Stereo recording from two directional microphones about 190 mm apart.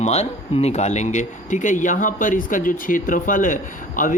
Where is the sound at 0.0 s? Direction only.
35° left (ahead or behind).